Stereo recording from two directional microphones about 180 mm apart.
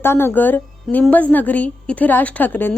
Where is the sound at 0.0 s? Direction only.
10° left (ahead or behind).